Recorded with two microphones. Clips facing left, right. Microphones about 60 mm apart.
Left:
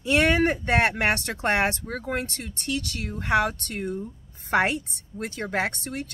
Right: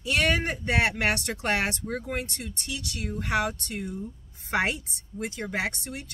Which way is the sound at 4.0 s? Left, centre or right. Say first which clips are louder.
Left 1 dB; left.